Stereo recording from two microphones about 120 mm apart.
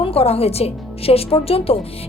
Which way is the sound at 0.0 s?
55° left (ahead or behind).